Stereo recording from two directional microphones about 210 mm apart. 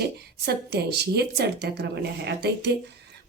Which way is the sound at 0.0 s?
50° right (ahead or behind).